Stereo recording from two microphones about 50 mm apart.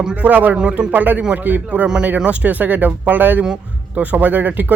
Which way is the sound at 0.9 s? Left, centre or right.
Right.